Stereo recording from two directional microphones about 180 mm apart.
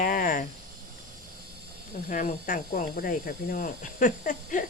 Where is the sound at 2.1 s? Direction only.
45° left (ahead or behind).